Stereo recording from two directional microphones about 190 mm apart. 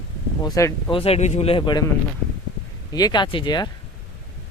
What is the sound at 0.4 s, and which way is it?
Speech, 20° left (ahead or behind).